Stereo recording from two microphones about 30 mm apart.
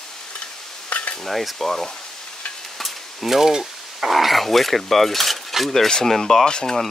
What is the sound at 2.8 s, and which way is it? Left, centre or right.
Frying, centre.